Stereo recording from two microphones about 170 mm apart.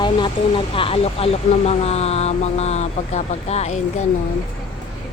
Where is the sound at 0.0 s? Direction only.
30° left (ahead or behind).